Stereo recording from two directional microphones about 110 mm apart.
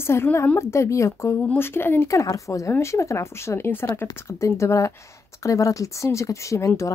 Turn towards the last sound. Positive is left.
turn(degrees=30)  # may be behind; listen again after turning